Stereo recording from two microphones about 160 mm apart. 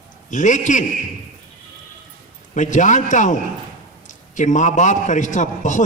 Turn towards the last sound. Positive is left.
turn(degrees=50)  # may be behind; listen again after turning